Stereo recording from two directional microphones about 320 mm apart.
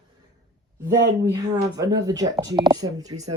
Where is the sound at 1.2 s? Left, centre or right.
Centre.